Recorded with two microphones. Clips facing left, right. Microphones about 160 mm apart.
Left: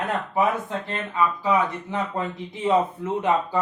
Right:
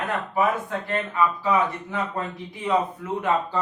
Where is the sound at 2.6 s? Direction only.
25° left (ahead or behind).